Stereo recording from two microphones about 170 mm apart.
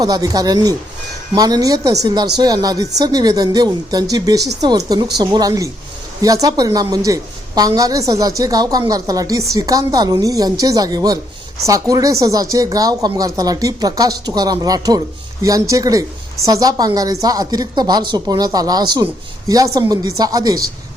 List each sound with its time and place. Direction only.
0.0 s a woman's voice: 20° right (ahead or behind)